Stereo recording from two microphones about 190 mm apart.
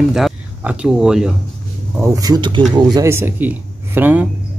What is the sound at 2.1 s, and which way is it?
Speech, 20° right (ahead or behind).